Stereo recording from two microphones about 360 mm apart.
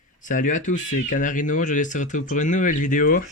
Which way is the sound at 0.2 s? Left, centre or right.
Left.